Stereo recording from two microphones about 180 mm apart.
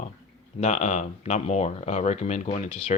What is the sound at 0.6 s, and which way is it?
Speech, 40° left (ahead or behind).